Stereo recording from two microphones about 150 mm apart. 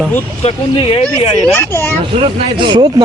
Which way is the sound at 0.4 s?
40° left (ahead or behind).